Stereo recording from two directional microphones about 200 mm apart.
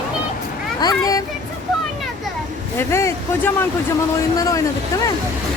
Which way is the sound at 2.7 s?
15° left (ahead or behind).